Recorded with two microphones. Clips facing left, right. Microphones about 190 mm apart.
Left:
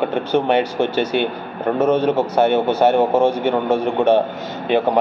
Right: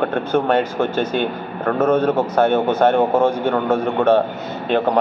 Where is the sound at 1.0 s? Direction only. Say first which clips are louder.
Left 1 dB; 70° left (ahead or behind).